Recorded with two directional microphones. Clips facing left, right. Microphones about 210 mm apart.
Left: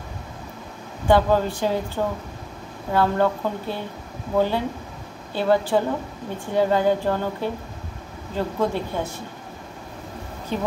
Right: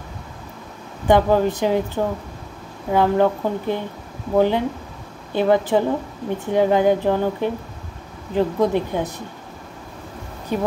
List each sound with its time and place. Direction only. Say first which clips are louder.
1.0 s speech: right 2 dB; 20° right (ahead or behind)
2.9 s speech: right 3 dB; 15° right (ahead or behind)
10.5 s speech: right 4 dB; 10° right (ahead or behind)